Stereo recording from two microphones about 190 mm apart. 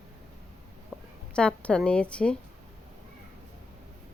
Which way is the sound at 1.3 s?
5° left (ahead or behind).